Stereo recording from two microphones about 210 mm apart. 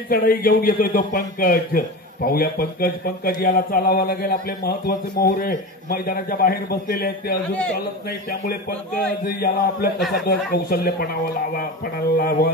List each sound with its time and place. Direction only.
0.1 s a man's voice: 45° left (ahead or behind)
12.2 s a man's voice: 45° left (ahead or behind)